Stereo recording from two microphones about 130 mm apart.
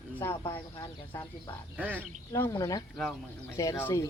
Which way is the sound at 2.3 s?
25° left (ahead or behind).